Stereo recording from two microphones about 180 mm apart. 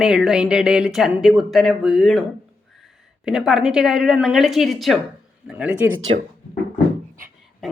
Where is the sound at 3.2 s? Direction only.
5° right (ahead or behind).